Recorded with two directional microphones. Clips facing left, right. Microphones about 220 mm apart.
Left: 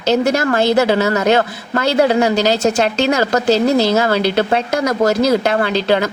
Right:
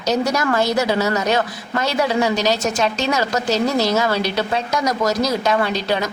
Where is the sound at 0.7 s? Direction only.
55° left (ahead or behind).